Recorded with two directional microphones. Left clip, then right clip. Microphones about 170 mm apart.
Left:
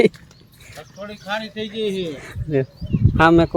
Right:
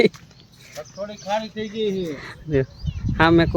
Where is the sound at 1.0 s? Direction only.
60° left (ahead or behind).